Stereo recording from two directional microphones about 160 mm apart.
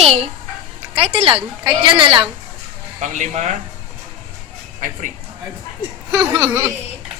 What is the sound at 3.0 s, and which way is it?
Speech, 50° right (ahead or behind).